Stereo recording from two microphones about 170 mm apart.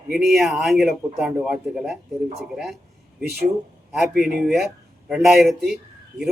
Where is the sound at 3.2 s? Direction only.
65° right (ahead or behind).